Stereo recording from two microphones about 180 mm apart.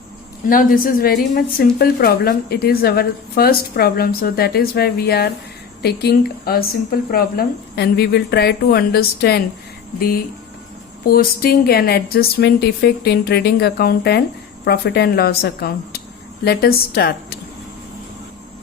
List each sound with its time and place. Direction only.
0.4 s speech: 50° left (ahead or behind)
11.0 s speech: 55° left (ahead or behind)